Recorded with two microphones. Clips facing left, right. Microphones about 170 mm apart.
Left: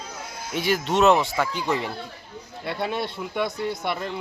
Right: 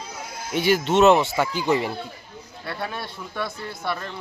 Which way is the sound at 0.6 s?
Centre (ahead or behind).